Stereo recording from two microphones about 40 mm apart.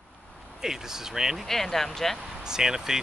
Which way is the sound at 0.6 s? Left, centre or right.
Centre.